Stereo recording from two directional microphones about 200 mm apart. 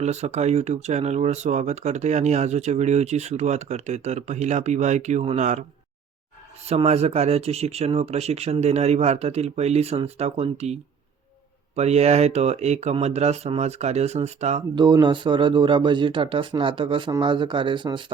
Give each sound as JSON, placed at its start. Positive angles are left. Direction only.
{"t": 0.0, "sound": "speech", "side_deg": -35}
{"t": 6.7, "sound": "speech", "side_deg": -30}
{"t": 14.8, "sound": "speech", "side_deg": -20}